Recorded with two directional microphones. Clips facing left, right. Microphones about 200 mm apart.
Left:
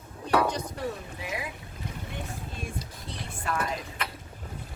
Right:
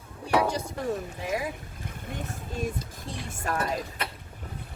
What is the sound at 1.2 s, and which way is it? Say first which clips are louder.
Speech: right 3 dB; 45° right (ahead or behind).